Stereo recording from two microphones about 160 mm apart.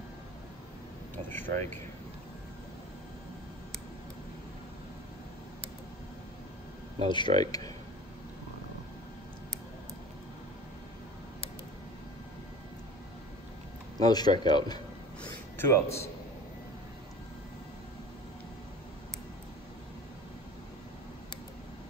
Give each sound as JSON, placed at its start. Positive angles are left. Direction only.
{"t": 1.3, "sound": "a man's voice", "side_deg": 15}
{"t": 7.1, "sound": "speech", "side_deg": 30}
{"t": 14.0, "sound": "speech", "side_deg": 25}
{"t": 15.5, "sound": "a man's voice", "side_deg": 15}